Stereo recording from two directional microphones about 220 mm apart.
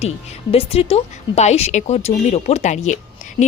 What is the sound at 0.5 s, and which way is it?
A woman's voice, 25° left (ahead or behind).